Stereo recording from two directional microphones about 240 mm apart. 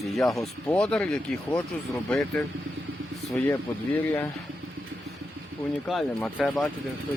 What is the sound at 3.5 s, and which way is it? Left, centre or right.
Speech, centre.